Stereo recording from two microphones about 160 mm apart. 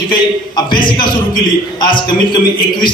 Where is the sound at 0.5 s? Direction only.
30° left (ahead or behind).